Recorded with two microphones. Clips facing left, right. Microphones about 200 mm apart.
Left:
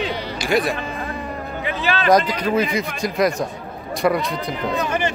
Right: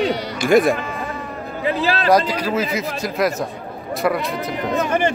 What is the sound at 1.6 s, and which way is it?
Speech, 35° right (ahead or behind).